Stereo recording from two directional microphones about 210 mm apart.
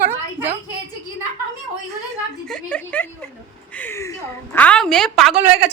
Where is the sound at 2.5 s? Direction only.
5° left (ahead or behind).